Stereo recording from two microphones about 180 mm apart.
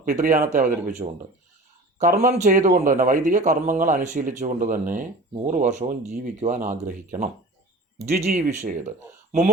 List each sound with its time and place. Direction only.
0.0 s speech: 45° right (ahead or behind)
2.0 s speech: 45° right (ahead or behind)
8.3 s speech: 45° right (ahead or behind)